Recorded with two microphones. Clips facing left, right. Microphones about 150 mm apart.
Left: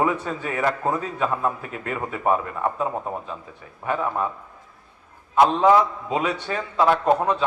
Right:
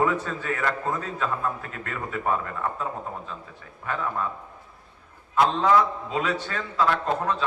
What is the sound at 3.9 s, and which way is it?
Speech, 20° left (ahead or behind).